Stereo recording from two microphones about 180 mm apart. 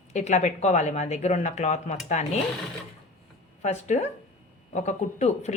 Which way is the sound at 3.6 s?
40° left (ahead or behind).